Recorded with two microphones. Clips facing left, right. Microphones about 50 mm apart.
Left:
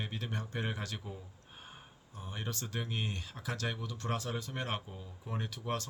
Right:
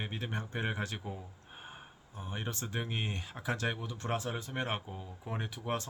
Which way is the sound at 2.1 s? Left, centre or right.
Right.